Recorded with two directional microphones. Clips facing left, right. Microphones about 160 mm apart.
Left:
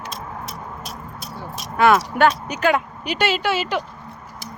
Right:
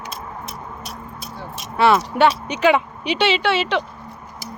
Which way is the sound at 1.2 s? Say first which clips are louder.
Left 2 dB; 40° left (ahead or behind).